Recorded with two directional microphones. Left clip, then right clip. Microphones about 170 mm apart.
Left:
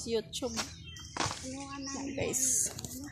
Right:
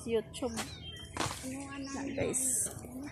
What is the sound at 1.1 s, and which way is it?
Speech, 45° left (ahead or behind).